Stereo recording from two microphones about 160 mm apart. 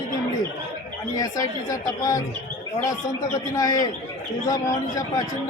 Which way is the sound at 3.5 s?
25° left (ahead or behind).